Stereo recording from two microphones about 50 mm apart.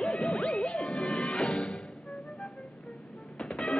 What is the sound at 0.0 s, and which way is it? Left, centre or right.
Music, centre.